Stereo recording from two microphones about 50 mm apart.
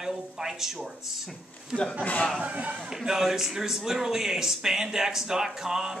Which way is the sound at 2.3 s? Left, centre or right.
Right.